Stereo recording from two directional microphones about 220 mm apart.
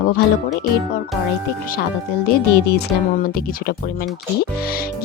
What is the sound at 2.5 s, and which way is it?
Speech, 45° left (ahead or behind).